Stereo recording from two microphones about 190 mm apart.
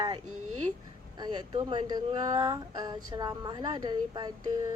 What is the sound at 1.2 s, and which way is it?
Speech, 20° right (ahead or behind).